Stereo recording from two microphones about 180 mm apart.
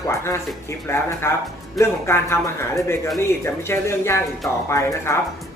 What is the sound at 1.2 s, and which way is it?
Speech, 15° left (ahead or behind).